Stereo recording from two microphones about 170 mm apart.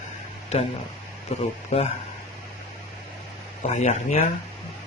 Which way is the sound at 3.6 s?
40° left (ahead or behind).